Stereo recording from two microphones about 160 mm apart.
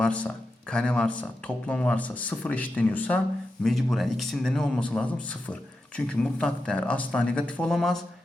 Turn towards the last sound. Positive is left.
turn(degrees=5)  # may be behind; listen again after turning